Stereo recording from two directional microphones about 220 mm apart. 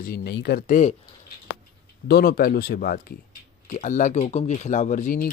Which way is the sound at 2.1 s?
45° left (ahead or behind).